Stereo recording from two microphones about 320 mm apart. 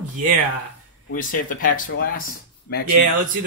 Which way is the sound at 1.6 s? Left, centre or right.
Left.